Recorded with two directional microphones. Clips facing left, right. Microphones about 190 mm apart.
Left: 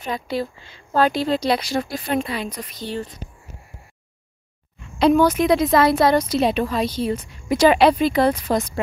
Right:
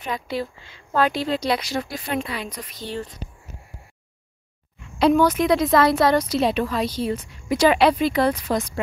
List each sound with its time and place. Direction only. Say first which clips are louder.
0.0 s speech: left 2 dB; 35° left (ahead or behind)
2.8 s speech: left 2 dB; 15° left (ahead or behind)
5.3 s a woman's voice: left 1 dB; 20° left (ahead or behind)